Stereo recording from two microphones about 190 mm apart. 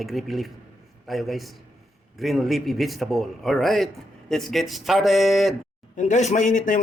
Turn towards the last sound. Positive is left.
turn(degrees=40)  # may be behind; listen again after turning